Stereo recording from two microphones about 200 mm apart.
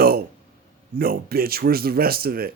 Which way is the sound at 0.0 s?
50° right (ahead or behind).